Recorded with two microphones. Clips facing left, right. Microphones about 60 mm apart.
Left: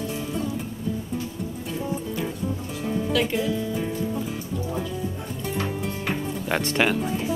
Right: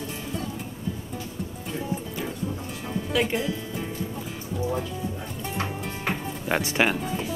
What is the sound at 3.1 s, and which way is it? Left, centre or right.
Music, centre.